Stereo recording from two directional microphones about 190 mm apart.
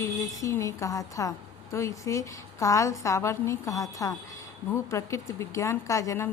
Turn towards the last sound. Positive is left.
turn(degrees=15)  # may be behind; listen again after turning